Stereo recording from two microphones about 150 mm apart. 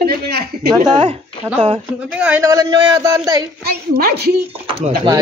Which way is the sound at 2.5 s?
25° right (ahead or behind).